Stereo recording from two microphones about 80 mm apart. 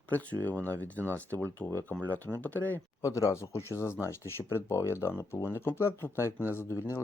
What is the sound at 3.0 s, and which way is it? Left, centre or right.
Speech, left.